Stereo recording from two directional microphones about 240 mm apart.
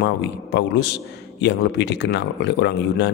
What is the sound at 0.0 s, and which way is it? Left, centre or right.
A man's voice, left.